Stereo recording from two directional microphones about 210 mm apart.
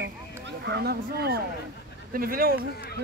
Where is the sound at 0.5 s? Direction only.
55° right (ahead or behind).